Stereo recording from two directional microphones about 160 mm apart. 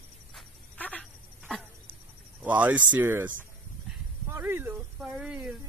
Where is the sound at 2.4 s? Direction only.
10° right (ahead or behind).